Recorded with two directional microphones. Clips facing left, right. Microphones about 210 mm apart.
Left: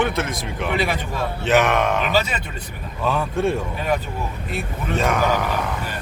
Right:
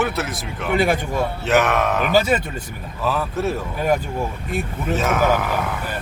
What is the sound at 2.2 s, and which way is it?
Speech, 45° right (ahead or behind).